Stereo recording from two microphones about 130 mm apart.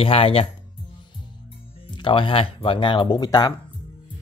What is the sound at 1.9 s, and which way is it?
Speech, 40° left (ahead or behind).